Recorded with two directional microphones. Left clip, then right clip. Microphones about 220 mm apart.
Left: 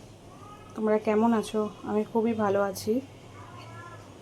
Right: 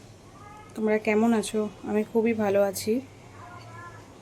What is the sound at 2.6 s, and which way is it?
Speech, 20° right (ahead or behind).